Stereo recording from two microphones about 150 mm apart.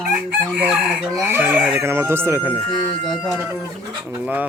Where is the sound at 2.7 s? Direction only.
Centre (ahead or behind).